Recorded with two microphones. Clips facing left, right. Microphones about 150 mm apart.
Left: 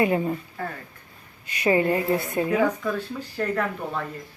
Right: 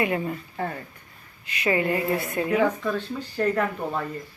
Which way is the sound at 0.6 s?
25° right (ahead or behind).